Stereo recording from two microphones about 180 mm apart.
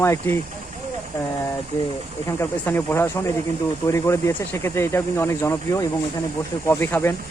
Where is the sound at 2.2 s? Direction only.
15° left (ahead or behind).